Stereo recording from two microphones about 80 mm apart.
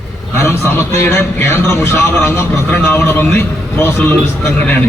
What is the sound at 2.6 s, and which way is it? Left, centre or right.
A man's voice, centre.